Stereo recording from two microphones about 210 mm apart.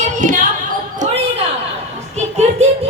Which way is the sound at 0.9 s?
35° right (ahead or behind).